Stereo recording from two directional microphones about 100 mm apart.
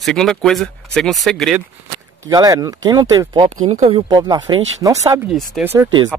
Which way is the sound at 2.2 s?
35° right (ahead or behind).